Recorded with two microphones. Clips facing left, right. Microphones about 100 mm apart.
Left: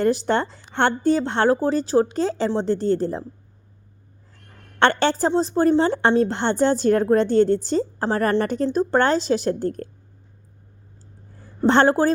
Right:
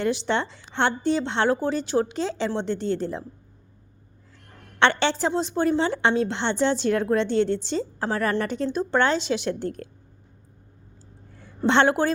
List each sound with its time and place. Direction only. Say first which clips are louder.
0.0 s a woman's voice: left 4 dB; 45° left (ahead or behind)
4.8 s a woman's voice: left 3 dB; 45° left (ahead or behind)
11.3 s a woman's voice: left 3 dB; 40° left (ahead or behind)